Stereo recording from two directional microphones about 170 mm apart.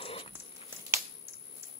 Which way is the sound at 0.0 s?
35° left (ahead or behind).